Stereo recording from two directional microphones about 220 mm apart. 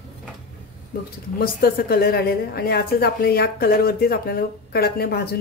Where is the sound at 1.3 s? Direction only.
45° left (ahead or behind).